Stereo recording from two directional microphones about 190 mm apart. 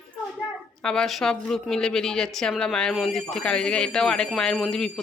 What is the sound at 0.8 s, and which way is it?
A woman's voice, 5° left (ahead or behind).